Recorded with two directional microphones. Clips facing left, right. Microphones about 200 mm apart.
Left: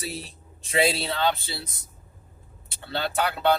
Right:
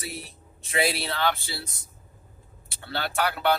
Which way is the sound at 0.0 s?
30° left (ahead or behind).